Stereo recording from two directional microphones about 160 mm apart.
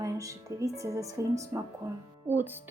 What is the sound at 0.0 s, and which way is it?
Speech, 20° right (ahead or behind).